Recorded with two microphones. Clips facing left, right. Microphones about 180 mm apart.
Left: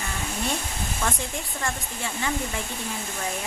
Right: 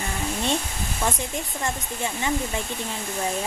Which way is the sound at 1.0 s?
20° right (ahead or behind).